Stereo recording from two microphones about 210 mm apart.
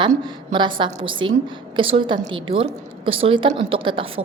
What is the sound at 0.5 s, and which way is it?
A woman's voice, 20° right (ahead or behind).